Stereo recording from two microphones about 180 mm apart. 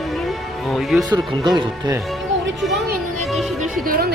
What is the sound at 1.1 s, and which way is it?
Speech, 25° right (ahead or behind).